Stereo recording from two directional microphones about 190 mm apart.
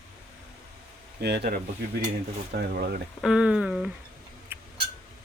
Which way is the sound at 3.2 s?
5° right (ahead or behind).